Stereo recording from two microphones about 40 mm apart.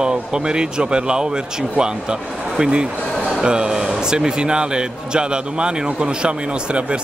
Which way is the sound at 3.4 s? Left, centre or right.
Centre.